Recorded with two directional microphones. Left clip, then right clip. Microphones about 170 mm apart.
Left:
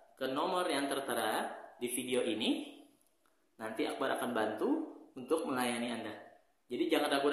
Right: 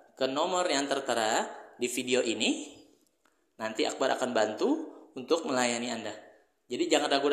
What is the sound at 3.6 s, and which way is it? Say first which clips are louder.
A man's voice: right 7 dB; 40° right (ahead or behind).